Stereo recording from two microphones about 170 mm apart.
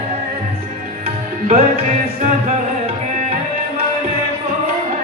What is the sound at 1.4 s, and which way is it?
Music, 40° right (ahead or behind).